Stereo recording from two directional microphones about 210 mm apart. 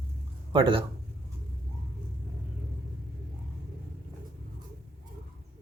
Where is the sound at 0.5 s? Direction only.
25° right (ahead or behind).